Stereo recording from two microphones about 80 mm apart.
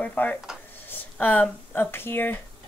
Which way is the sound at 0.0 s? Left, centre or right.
Centre.